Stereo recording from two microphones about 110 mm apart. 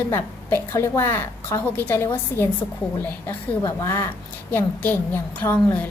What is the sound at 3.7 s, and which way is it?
A woman's voice, 25° left (ahead or behind).